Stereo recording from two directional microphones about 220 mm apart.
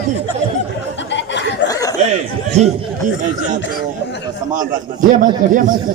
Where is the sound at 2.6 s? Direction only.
30° right (ahead or behind).